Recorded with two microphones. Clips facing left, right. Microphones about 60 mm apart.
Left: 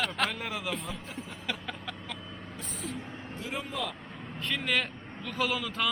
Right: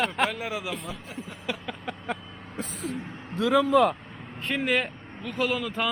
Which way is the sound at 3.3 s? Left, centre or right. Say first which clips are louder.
Right 16 dB; right.